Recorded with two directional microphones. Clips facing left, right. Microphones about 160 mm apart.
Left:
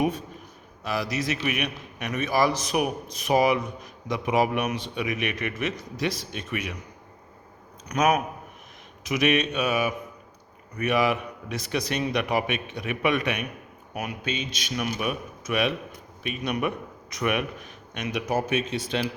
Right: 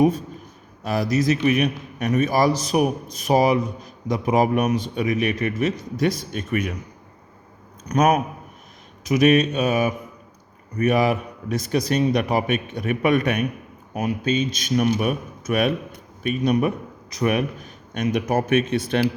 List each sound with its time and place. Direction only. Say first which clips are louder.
0.9 s a man's voice: right 7 dB; 45° right (ahead or behind)
7.9 s a man's voice: right 4 dB; 45° right (ahead or behind)